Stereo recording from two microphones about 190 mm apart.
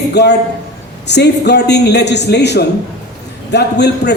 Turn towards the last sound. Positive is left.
turn(degrees=60)  # may be behind; listen again after turning